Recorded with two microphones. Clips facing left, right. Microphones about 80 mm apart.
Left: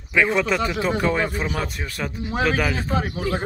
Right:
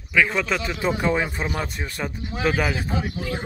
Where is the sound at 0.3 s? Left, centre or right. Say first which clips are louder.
Left 4 dB; centre.